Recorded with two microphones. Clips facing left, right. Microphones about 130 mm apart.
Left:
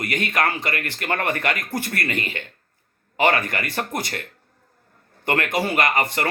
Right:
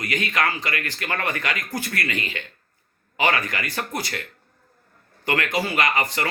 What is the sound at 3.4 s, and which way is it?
Speech, 55° left (ahead or behind).